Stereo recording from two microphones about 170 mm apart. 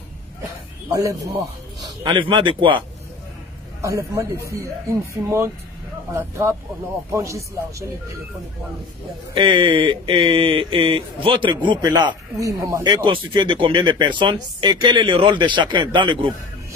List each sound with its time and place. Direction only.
0.9 s speech: 20° right (ahead or behind)
2.0 s speech: 30° right (ahead or behind)
3.8 s a man's voice: 20° right (ahead or behind)
9.3 s speech: 30° right (ahead or behind)
12.8 s speech: 30° right (ahead or behind)